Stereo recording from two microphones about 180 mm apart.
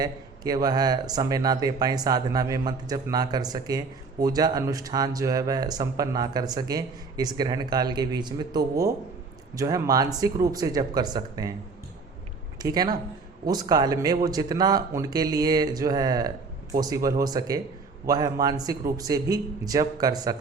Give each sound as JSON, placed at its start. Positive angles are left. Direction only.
{"t": 0.0, "sound": "speech", "side_deg": -20}
{"t": 12.6, "sound": "speech", "side_deg": -20}